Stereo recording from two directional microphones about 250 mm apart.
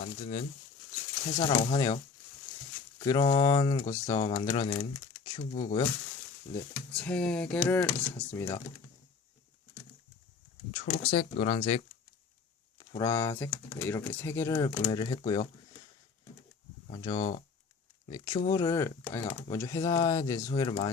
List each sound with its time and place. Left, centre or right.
0.2 s speech: left
3.0 s speech: centre
4.8 s a sound: centre
5.5 s speech: left
6.5 s speech: centre
10.7 s speech: centre
16.9 s speech: centre